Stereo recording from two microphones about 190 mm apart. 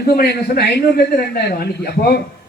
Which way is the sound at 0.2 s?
55° left (ahead or behind).